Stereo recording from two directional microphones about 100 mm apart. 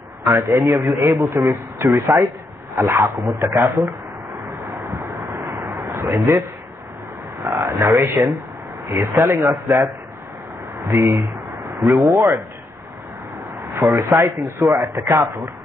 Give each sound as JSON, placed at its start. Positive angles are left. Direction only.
{"t": 0.2, "sound": "a man's voice", "side_deg": -35}
{"t": 3.2, "sound": "speech", "side_deg": -40}
{"t": 3.4, "sound": "speech", "side_deg": -25}
{"t": 4.8, "sound": "a sound", "side_deg": -35}
{"t": 7.4, "sound": "a sound", "side_deg": -30}
{"t": 8.8, "sound": "speech", "side_deg": -25}
{"t": 10.9, "sound": "speech", "side_deg": -25}
{"t": 13.8, "sound": "speech", "side_deg": -30}